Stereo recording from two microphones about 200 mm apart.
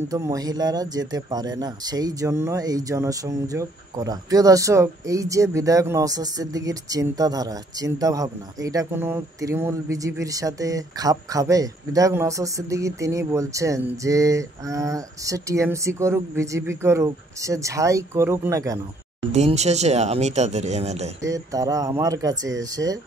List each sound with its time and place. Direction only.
0.1 s speech: 15° right (ahead or behind)
19.3 s speech: 35° right (ahead or behind)
21.2 s speech: 15° right (ahead or behind)